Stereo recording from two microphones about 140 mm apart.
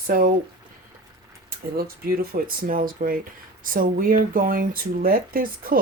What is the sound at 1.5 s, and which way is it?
Speech, 90° right.